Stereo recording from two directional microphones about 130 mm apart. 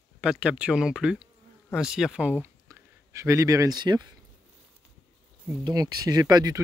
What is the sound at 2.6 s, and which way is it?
Speech, 20° right (ahead or behind).